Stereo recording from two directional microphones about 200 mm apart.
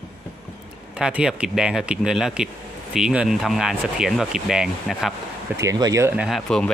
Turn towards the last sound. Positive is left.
turn(degrees=5)  # may be behind; listen again after turning